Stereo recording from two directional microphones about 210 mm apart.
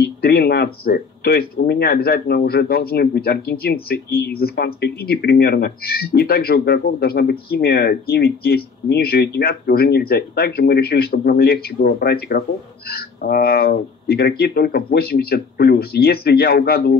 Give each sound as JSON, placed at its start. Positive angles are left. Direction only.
{"t": 0.0, "sound": "speech", "side_deg": 50}